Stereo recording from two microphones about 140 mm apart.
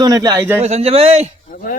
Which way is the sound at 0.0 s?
25° right (ahead or behind).